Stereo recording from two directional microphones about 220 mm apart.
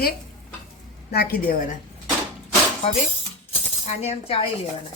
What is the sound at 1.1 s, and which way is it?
Speech, 45° left (ahead or behind).